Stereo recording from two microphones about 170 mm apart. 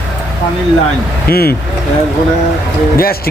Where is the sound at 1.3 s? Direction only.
65° left (ahead or behind).